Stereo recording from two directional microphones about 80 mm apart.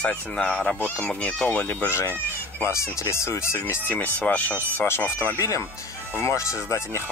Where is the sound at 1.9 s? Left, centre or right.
Left.